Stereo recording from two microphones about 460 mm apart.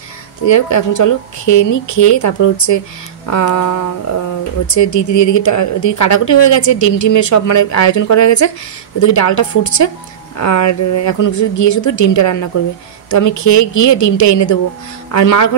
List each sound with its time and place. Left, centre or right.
0.5 s a woman's voice: left
4.7 s a woman's voice: left